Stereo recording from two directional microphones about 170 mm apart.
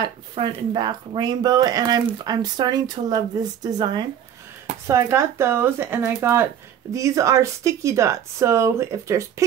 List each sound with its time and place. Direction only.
0.0 s speech: 25° right (ahead or behind)